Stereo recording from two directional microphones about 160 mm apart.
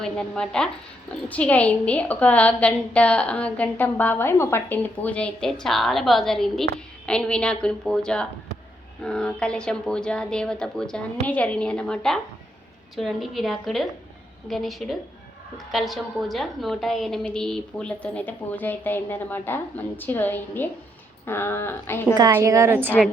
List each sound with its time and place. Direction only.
0.0 s a woman's voice: 5° left (ahead or behind)
22.4 s a woman's voice: 20° right (ahead or behind)